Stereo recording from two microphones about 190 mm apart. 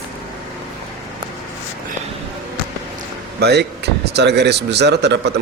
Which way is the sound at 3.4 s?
60° right (ahead or behind).